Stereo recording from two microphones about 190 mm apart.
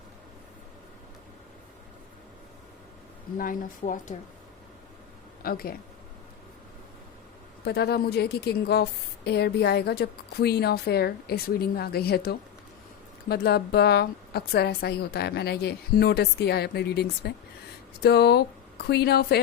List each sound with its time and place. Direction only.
3.3 s speech: 45° left (ahead or behind)
5.4 s speech: 50° left (ahead or behind)
7.6 s a woman's voice: 60° left (ahead or behind)